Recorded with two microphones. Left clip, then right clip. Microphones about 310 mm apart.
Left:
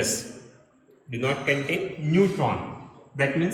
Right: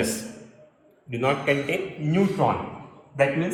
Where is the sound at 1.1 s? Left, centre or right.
Right.